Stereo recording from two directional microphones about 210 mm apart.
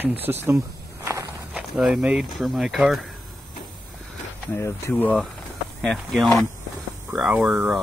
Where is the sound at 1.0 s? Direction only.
15° right (ahead or behind).